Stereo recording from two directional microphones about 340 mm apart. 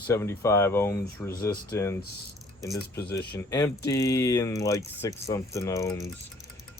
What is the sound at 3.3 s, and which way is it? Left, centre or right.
Speech, centre.